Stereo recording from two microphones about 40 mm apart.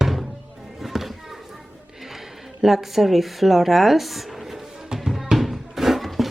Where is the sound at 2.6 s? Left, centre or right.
Centre.